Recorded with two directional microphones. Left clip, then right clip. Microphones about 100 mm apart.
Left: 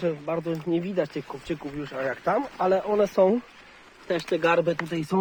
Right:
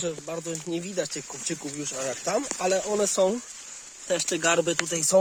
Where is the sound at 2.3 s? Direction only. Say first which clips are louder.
Left 1 dB; 65° right (ahead or behind).